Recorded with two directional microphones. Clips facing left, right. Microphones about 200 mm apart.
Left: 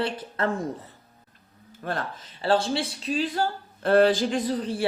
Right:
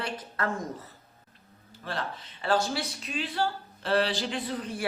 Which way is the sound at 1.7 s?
50° left (ahead or behind).